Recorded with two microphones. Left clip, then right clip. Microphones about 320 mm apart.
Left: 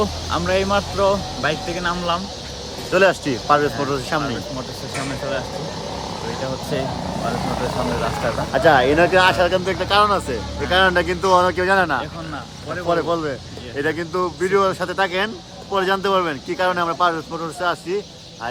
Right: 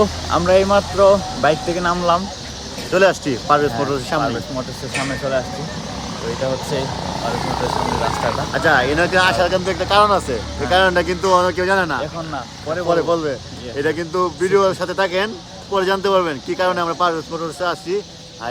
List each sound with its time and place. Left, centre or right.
0.0 s speech: centre
2.9 s speech: centre
8.5 s speech: left; by 18.0 s centre